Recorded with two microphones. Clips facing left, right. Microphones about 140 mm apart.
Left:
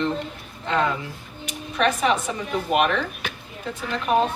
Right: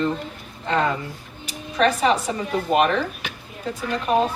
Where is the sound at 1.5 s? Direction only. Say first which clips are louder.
Right 2 dB; 35° right (ahead or behind).